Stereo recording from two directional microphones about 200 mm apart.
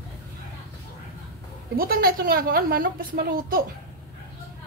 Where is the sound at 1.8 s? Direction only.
50° right (ahead or behind).